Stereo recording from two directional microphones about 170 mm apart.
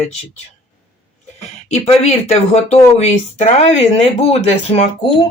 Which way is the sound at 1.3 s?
40° left (ahead or behind).